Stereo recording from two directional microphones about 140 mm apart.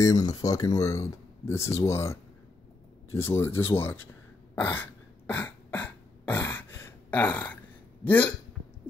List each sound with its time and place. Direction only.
0.0 s speech: 25° left (ahead or behind)
4.6 s beatboxing: 15° left (ahead or behind)
8.0 s speech: 15° left (ahead or behind)